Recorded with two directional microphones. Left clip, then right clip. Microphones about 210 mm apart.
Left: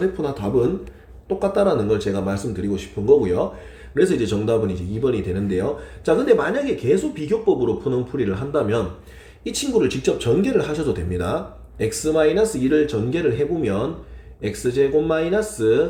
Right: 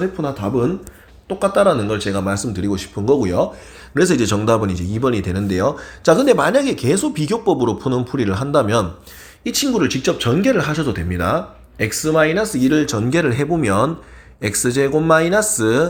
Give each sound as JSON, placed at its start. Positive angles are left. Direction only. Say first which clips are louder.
{"t": 1.5, "sound": "a man's voice", "louder": "right 4 dB", "side_deg": -35}